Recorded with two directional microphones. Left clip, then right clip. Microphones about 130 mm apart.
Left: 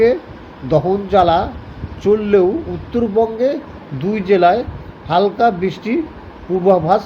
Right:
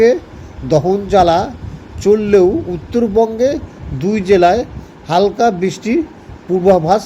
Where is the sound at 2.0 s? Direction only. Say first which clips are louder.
Right 3 dB; 55° right (ahead or behind).